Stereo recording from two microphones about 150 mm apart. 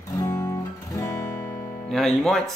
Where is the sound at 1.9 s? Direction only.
Centre (ahead or behind).